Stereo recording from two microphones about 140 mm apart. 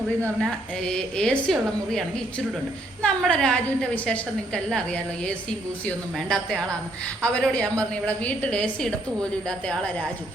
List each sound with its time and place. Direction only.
0.3 s a woman's voice: centre (ahead or behind)